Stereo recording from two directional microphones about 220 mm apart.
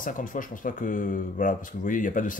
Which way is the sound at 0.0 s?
40° left (ahead or behind).